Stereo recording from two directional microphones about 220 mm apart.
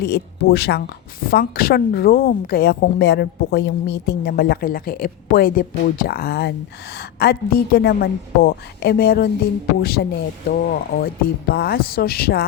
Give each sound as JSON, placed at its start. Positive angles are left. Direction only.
{"t": 0.0, "sound": "a woman's voice", "side_deg": 50}